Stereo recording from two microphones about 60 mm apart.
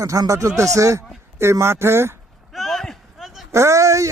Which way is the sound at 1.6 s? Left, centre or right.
Right.